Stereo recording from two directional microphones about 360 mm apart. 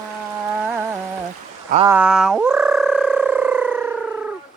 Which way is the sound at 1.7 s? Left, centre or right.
Centre.